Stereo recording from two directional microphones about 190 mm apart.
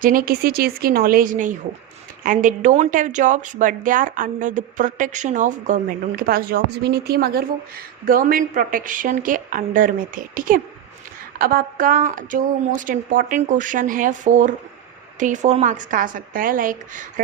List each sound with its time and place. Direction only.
0.0 s speech: 50° right (ahead or behind)